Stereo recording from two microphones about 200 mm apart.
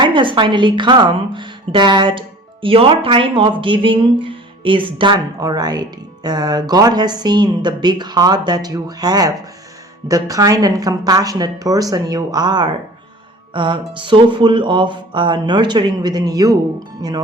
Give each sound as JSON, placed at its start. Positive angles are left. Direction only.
{"t": 0.0, "sound": "a woman's voice", "side_deg": -25}